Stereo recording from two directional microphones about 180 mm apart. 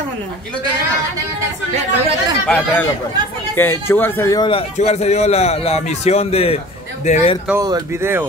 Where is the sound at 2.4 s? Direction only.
10° left (ahead or behind).